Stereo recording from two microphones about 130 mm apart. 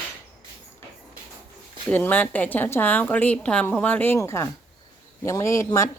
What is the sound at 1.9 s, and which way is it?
A woman's voice, 15° left (ahead or behind).